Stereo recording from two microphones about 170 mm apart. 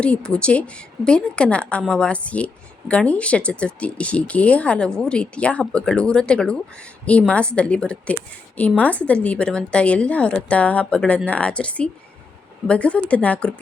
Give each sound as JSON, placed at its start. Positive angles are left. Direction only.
{"t": 0.0, "sound": "speech", "side_deg": 5}